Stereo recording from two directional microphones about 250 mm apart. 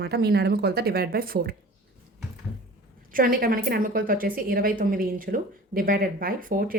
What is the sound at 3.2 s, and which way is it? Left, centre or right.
A woman's voice, right.